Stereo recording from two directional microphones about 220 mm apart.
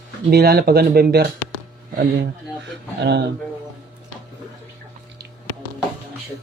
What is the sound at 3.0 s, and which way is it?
Speech, 50° right (ahead or behind).